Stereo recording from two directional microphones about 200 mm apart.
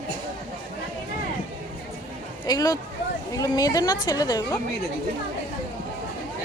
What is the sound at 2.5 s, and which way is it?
A woman's voice, 20° left (ahead or behind).